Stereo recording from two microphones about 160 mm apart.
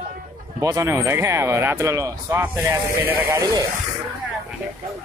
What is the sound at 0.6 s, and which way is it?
Speech, 20° right (ahead or behind).